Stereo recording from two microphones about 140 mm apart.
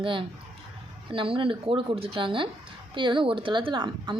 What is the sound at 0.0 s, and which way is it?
A woman's voice, 35° right (ahead or behind).